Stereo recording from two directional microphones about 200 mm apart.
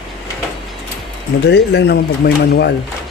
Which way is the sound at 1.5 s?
60° left (ahead or behind).